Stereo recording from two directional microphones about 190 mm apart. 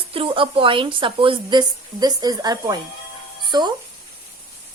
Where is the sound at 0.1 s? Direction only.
25° right (ahead or behind).